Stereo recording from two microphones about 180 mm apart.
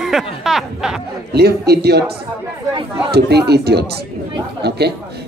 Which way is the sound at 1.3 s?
65° right (ahead or behind).